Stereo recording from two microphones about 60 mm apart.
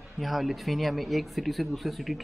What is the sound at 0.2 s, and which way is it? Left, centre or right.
Speech, centre.